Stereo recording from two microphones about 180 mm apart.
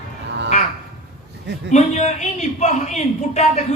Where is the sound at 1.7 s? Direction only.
40° left (ahead or behind).